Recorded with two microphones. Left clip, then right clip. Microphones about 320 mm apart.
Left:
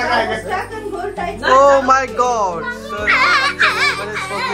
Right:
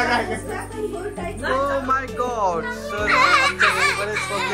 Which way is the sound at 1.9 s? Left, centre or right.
Centre.